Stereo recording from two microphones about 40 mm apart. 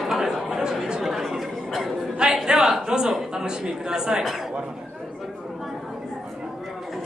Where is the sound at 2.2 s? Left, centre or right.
Centre.